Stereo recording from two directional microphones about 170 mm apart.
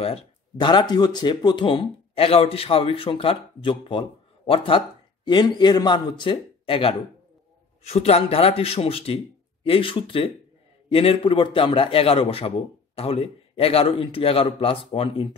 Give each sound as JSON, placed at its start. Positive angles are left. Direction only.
{"t": 0.0, "sound": "a man's voice", "side_deg": 30}